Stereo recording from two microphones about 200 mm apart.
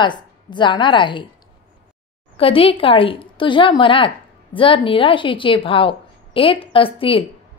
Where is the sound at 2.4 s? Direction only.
25° left (ahead or behind).